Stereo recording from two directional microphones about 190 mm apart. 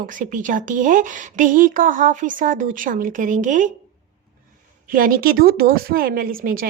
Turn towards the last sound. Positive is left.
turn(degrees=-50)  # may be behind; listen again after turning